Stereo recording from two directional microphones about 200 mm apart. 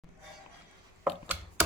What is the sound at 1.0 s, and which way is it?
Chopping, 5° right (ahead or behind).